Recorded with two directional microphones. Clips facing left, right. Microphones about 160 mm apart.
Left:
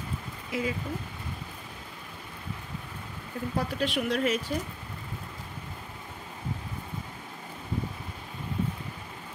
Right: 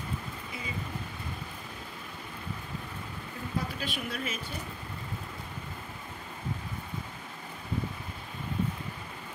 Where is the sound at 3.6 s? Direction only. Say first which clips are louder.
Left 8 dB; 70° left (ahead or behind).